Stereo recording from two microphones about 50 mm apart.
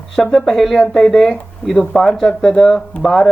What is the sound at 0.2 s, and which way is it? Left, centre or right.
Speech, centre.